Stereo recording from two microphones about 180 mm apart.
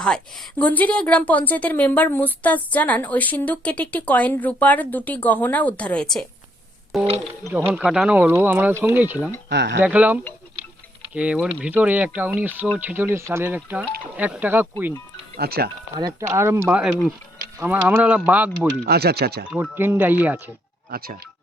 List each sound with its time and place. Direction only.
0.0 s a woman's voice: 5° left (ahead or behind)
7.4 s speech: 10° right (ahead or behind)
9.5 s speech: 75° right (ahead or behind)
9.8 s speech: 10° right (ahead or behind)
15.4 s speech: 60° right (ahead or behind)
16.3 s speech: 15° right (ahead or behind)
18.9 s speech: 60° right (ahead or behind)
19.5 s speech: 10° right (ahead or behind)